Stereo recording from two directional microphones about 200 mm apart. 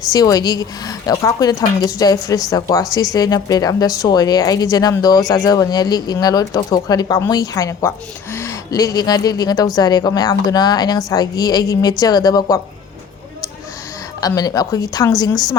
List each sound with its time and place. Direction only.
0.1 s speech: 20° left (ahead or behind)
14.2 s a woman's voice: 20° left (ahead or behind)